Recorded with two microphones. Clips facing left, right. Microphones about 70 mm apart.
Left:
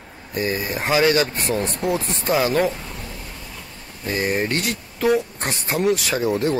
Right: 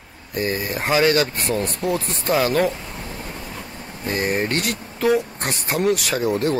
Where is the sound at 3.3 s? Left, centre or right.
Right.